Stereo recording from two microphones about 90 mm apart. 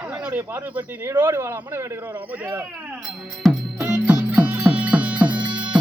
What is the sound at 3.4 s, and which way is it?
Speech, 5° left (ahead or behind).